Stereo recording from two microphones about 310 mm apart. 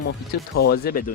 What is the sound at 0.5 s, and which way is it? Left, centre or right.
Speech, left.